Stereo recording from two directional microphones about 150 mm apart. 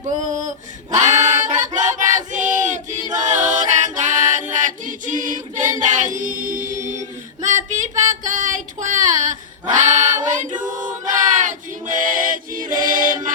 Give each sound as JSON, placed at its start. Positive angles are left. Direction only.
{"t": 0.9, "sound": "choir", "side_deg": -55}
{"t": 8.1, "sound": "singing", "side_deg": -55}
{"t": 10.6, "sound": "choir", "side_deg": -55}